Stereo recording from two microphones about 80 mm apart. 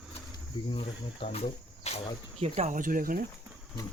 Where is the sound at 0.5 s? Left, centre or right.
Left.